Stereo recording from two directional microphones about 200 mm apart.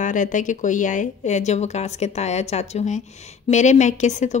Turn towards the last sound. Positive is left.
turn(degrees=35)  # may be behind; listen again after turning